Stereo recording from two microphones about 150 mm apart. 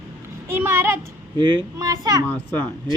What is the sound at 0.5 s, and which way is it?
Speech, 15° right (ahead or behind).